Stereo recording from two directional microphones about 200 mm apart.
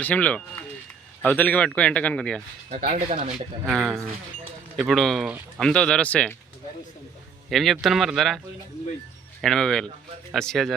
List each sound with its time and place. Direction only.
0.0 s a man's voice: 10° left (ahead or behind)
2.6 s speech: 40° right (ahead or behind)
3.7 s speech: centre (ahead or behind)
7.5 s speech: centre (ahead or behind)
9.4 s speech: 5° left (ahead or behind)